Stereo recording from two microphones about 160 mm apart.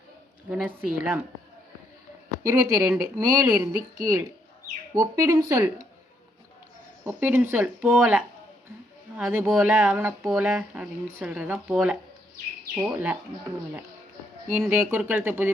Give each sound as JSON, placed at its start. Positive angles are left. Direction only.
{"t": 0.5, "sound": "speech", "side_deg": -10}
{"t": 2.4, "sound": "speech", "side_deg": -20}
{"t": 7.0, "sound": "speech", "side_deg": -10}
{"t": 9.1, "sound": "speech", "side_deg": -10}
{"t": 14.7, "sound": "speech", "side_deg": -15}